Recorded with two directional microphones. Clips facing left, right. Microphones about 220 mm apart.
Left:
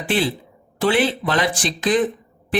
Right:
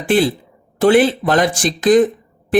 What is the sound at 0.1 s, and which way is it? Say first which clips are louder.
Speech: right 7 dB; 45° right (ahead or behind).